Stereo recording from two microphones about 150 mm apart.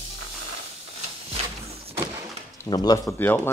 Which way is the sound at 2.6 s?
25° left (ahead or behind).